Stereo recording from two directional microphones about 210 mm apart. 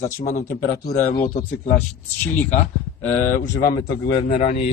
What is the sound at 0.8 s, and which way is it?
Speech, 45° left (ahead or behind).